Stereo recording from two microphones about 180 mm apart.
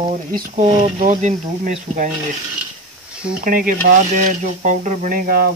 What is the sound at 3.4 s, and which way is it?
Speech, 50° right (ahead or behind).